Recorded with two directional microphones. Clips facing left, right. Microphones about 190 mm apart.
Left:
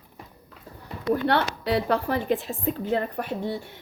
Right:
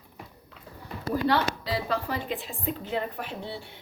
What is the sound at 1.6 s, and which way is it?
A woman's voice, 60° left (ahead or behind).